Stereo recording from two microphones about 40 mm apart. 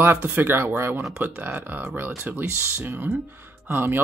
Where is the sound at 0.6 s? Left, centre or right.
Right.